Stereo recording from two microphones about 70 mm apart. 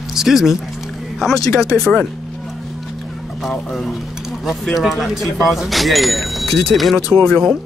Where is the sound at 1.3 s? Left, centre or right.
Left.